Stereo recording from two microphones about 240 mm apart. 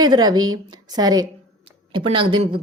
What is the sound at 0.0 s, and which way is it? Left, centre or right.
A woman's voice, centre.